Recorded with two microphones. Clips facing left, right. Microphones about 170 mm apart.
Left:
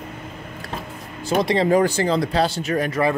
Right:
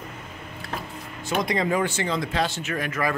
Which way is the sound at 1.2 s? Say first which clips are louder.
Left 6 dB; 30° left (ahead or behind).